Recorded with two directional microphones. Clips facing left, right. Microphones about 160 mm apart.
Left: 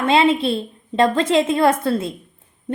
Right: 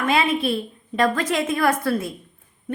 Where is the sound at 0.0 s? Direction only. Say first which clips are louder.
Left 5 dB; 25° left (ahead or behind).